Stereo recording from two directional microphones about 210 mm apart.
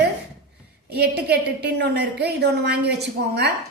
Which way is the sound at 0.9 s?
50° right (ahead or behind).